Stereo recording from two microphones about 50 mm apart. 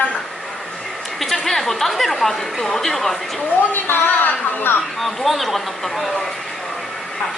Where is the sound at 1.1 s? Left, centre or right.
Centre.